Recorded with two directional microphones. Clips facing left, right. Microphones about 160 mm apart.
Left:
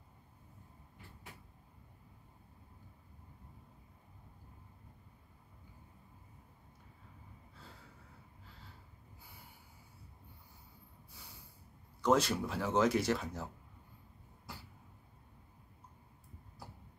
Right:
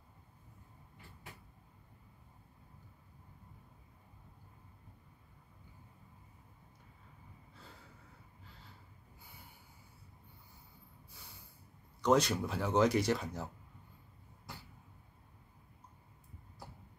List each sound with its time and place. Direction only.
12.0 s speech: 5° left (ahead or behind)